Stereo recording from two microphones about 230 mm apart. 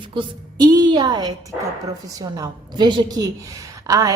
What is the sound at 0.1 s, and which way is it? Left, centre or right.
A woman's voice, centre.